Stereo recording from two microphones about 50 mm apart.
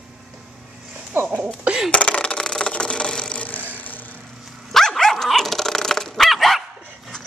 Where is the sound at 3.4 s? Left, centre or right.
Left.